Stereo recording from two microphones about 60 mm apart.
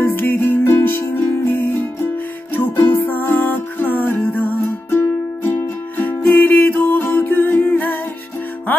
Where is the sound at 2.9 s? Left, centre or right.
Left.